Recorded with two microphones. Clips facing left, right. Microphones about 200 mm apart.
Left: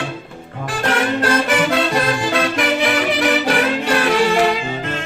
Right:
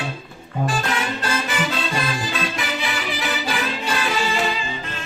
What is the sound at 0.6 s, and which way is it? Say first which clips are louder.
Music: left 4 dB; 70° left (ahead or behind).